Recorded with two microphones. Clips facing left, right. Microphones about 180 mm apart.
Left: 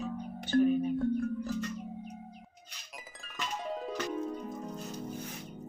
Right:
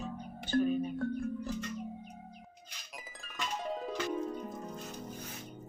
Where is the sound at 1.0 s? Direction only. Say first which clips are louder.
Left 5 dB; centre (ahead or behind).